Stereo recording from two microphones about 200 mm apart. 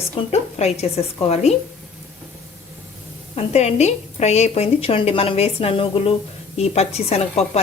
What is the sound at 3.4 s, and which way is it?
A woman's voice, 35° left (ahead or behind).